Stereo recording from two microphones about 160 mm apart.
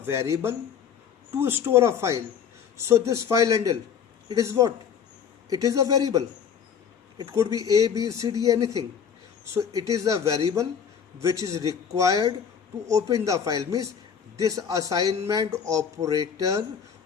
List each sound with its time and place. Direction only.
0.0 s speech: 15° right (ahead or behind)